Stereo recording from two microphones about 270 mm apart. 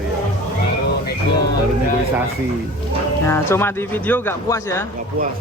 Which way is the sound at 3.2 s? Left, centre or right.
Centre.